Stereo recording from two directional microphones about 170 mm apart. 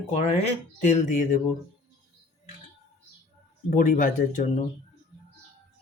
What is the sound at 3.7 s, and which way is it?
Speech, 50° left (ahead or behind).